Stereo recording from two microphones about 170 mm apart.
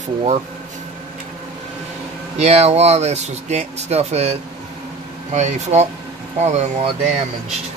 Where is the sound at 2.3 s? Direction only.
40° right (ahead or behind).